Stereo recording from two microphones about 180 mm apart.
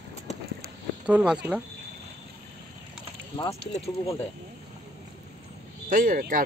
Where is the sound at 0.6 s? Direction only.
10° right (ahead or behind).